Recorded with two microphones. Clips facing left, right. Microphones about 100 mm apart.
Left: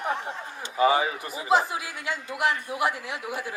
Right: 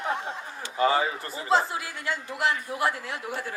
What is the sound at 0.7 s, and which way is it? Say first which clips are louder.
A man's voice: left 2 dB; 15° left (ahead or behind).